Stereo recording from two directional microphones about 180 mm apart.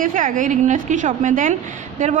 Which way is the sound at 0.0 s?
50° right (ahead or behind).